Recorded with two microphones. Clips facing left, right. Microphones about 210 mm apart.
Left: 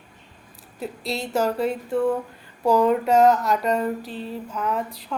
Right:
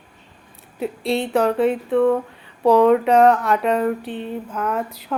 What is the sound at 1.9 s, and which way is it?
Speech, 75° right (ahead or behind).